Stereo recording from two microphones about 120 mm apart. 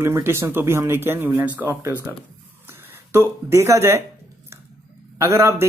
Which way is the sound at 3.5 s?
25° right (ahead or behind).